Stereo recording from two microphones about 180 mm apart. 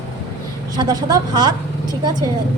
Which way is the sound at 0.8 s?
20° right (ahead or behind).